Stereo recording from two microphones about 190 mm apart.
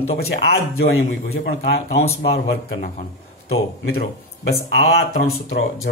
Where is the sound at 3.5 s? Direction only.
55° left (ahead or behind).